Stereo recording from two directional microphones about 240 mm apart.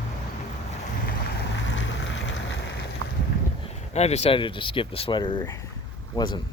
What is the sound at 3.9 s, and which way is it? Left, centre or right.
Speech, left.